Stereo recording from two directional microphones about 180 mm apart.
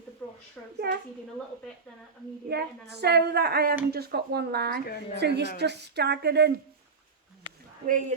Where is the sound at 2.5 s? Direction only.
65° right (ahead or behind).